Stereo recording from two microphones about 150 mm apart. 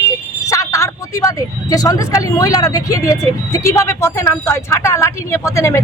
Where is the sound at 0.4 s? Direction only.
20° left (ahead or behind).